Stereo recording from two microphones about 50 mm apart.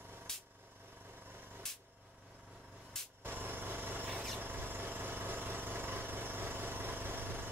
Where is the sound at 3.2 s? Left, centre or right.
Right.